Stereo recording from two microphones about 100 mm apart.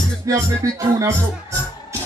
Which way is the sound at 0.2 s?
35° right (ahead or behind).